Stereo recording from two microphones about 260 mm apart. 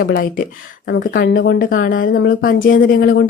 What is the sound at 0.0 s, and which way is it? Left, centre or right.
Speech, left.